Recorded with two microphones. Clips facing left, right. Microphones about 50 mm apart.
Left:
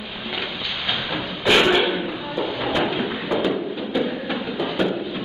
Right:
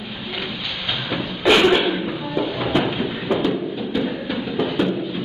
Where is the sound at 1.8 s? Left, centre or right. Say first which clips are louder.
Even; left.